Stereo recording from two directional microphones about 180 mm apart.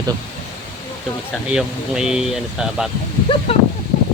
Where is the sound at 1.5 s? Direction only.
5° right (ahead or behind).